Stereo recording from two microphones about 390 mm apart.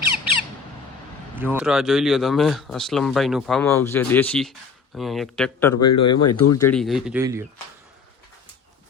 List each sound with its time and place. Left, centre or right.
1.4 s speech: centre
5.7 s speech: left
6.7 s speech: centre